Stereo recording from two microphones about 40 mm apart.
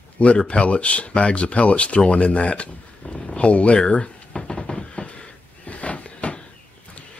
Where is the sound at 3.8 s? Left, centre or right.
Left.